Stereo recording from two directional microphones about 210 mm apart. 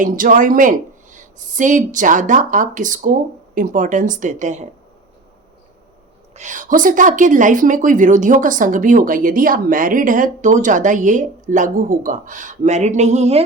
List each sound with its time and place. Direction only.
0.0 s a woman's voice: 40° right (ahead or behind)
6.3 s a woman's voice: 35° right (ahead or behind)